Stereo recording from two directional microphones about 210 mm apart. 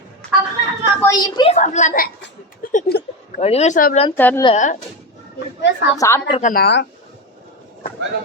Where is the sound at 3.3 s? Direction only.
30° left (ahead or behind).